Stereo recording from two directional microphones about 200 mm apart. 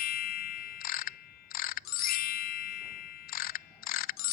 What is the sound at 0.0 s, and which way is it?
Ding, 50° left (ahead or behind).